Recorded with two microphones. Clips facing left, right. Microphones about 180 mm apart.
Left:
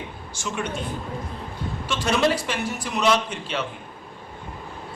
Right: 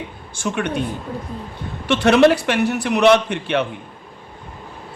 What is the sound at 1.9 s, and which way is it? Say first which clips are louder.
A man's voice: right 9 dB; 65° right (ahead or behind).